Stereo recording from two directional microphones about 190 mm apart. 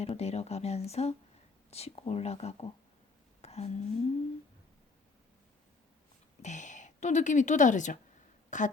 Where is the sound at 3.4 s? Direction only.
35° left (ahead or behind).